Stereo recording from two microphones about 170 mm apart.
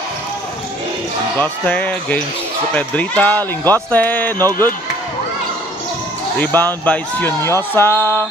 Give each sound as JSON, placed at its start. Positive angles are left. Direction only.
{"t": 1.4, "sound": "speech", "side_deg": 10}
{"t": 4.4, "sound": "speech", "side_deg": -20}
{"t": 6.4, "sound": "speech", "side_deg": 10}